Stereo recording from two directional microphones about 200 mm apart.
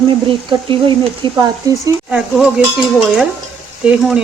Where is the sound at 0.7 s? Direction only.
25° right (ahead or behind).